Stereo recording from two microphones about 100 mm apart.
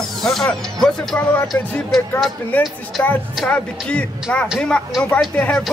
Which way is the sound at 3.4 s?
10° left (ahead or behind).